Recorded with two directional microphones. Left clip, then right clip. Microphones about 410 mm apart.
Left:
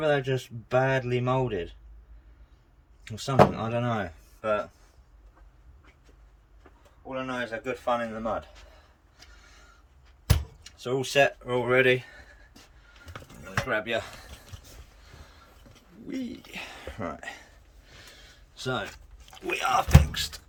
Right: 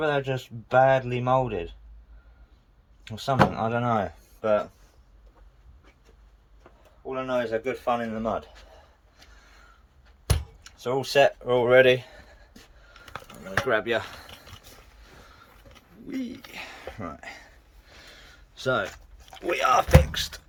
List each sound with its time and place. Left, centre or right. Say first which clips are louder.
0.0 s speech: even; centre
3.0 s speech: left 2 dB; centre
7.2 s speech: right 6 dB; right
10.6 s speech: right 3 dB; centre
13.7 s speech: right 4 dB; centre
16.0 s speech: right 1 dB; centre
18.1 s a sound: right 2 dB; centre
19.3 s speech: right 4 dB; centre